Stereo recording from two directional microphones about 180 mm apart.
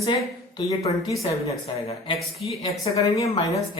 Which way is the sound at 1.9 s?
35° left (ahead or behind).